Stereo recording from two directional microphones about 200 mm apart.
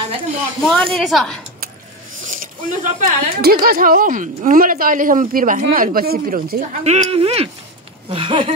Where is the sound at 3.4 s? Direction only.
50° right (ahead or behind).